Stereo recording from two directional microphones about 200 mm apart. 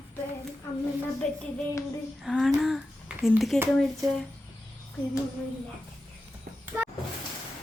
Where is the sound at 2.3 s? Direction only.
Centre (ahead or behind).